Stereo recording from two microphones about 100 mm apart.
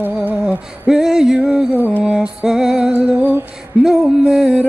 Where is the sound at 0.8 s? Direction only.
5° right (ahead or behind).